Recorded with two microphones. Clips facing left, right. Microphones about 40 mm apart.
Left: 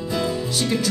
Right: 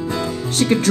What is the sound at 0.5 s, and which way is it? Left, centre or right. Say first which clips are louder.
Speech: right 8 dB; right.